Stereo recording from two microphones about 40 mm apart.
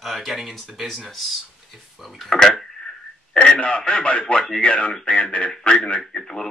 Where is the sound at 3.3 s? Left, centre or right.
Centre.